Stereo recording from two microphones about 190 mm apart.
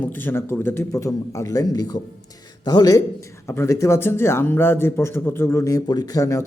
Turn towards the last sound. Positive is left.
turn(degrees=15)  # may be behind; listen again after turning